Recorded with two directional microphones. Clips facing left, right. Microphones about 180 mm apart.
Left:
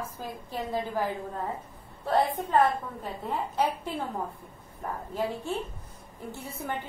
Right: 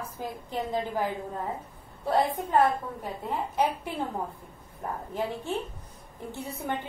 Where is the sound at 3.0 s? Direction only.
15° right (ahead or behind).